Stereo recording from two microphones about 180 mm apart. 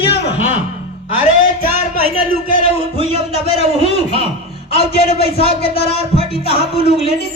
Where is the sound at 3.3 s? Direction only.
35° left (ahead or behind).